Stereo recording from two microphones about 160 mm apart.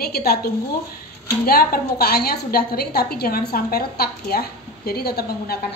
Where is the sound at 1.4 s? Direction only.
70° left (ahead or behind).